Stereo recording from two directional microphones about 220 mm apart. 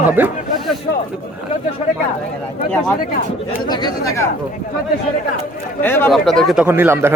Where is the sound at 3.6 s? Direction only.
20° left (ahead or behind).